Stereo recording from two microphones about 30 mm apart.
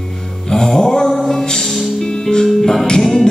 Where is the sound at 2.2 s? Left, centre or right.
Centre.